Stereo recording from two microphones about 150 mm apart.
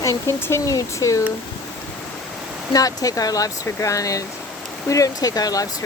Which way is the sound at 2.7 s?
25° left (ahead or behind).